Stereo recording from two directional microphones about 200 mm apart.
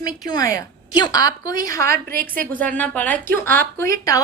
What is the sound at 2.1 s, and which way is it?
Speech, 45° right (ahead or behind).